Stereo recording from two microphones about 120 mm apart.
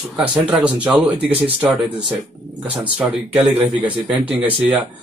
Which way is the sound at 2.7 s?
10° right (ahead or behind).